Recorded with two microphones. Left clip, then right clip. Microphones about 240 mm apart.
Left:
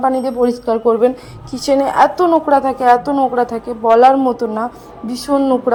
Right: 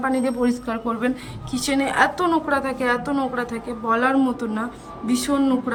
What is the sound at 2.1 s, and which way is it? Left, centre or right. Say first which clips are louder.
Speech: left 8 dB; centre.